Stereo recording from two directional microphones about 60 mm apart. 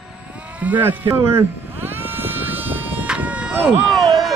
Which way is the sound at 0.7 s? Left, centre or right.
Right.